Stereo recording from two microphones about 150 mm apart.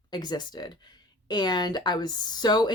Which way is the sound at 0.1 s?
30° left (ahead or behind).